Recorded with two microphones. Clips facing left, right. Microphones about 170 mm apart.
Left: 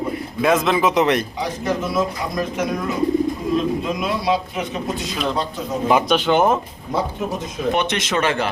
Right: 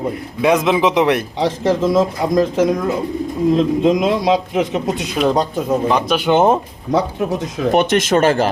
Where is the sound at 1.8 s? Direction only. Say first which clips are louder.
Right 7 dB; 90° right.